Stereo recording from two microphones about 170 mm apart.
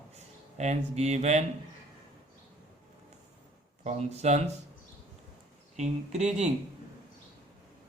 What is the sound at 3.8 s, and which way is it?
Speech, 40° right (ahead or behind).